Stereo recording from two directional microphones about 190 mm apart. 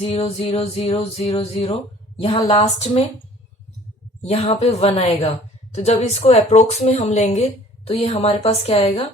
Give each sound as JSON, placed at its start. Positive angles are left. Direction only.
{"t": 0.0, "sound": "music", "side_deg": 30}
{"t": 2.2, "sound": "speech", "side_deg": 30}
{"t": 4.2, "sound": "speech", "side_deg": 35}